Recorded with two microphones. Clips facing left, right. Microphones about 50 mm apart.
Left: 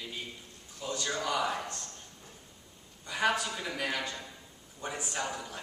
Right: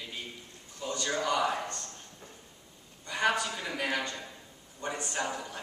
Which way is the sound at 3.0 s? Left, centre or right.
Centre.